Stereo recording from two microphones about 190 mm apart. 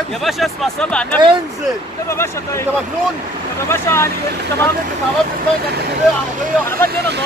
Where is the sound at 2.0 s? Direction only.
15° left (ahead or behind).